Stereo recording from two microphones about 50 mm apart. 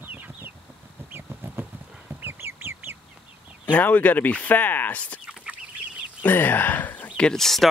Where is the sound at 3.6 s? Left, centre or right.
Left.